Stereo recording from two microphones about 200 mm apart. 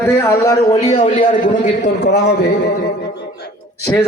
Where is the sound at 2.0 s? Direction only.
55° left (ahead or behind).